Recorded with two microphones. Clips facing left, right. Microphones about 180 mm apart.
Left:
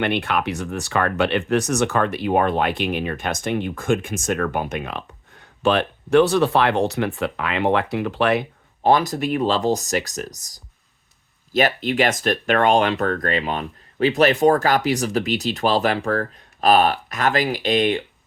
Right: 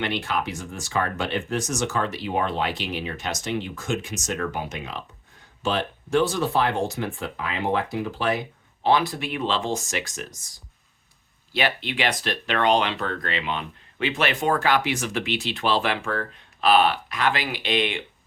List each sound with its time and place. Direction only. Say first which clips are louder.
0.0 s speech: left 5 dB; 60° left (ahead or behind)
8.8 s speech: left 4 dB; 45° left (ahead or behind)